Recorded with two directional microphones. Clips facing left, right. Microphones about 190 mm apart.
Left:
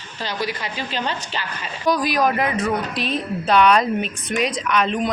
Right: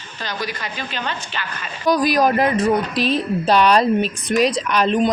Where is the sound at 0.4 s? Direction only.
30° left (ahead or behind).